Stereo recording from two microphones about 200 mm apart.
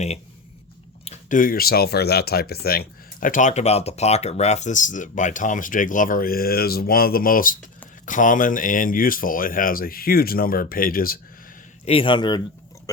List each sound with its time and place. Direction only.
1.0 s speech: 40° left (ahead or behind)
11.9 s a man's voice: 25° left (ahead or behind)